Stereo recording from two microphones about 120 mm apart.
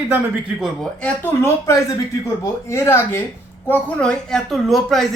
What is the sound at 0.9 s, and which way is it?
A man's voice, 15° left (ahead or behind).